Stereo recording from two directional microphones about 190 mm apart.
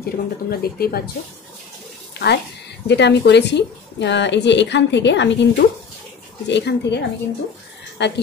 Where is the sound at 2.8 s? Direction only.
65° left (ahead or behind).